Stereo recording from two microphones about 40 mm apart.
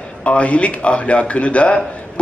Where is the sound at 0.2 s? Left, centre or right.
Left.